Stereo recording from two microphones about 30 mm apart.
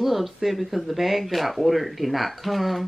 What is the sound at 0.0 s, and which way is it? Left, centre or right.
Speech, centre.